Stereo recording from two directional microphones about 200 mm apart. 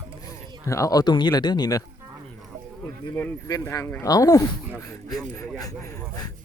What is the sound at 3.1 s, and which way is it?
Speech, 15° left (ahead or behind).